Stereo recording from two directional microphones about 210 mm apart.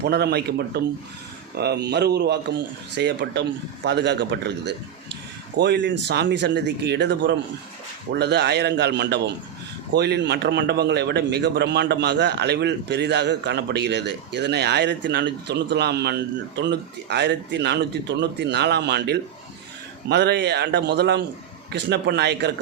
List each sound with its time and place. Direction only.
0.0 s a man's voice: 50° right (ahead or behind)